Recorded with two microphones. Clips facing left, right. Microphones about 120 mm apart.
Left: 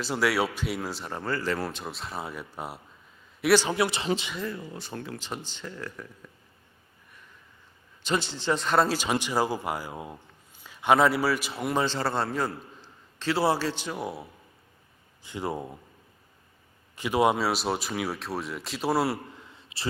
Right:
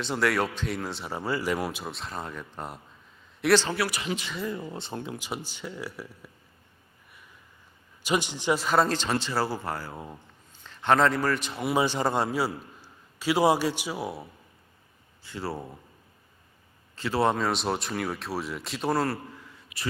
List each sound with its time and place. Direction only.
0.0 s speech: 5° left (ahead or behind)
1.1 s a man's voice: 10° right (ahead or behind)
1.8 s speech: centre (ahead or behind); by 4.3 s 30° left (ahead or behind)
4.4 s a man's voice: 25° right (ahead or behind); by 6.3 s 10° right (ahead or behind)
8.0 s a man's voice: 15° right (ahead or behind); by 11.7 s 5° left (ahead or behind)
11.7 s a man's voice: 10° right (ahead or behind)
15.2 s speech: 15° left (ahead or behind)
16.9 s speech: 15° left (ahead or behind)